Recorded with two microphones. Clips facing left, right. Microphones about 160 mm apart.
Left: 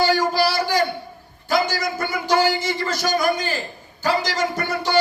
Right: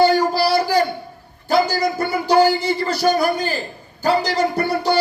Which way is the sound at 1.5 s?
35° right (ahead or behind).